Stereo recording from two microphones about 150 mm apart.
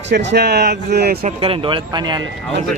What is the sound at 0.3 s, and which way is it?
Speech, 90° right.